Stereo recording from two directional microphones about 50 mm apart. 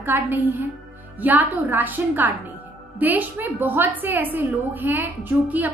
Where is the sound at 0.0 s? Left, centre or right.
Right.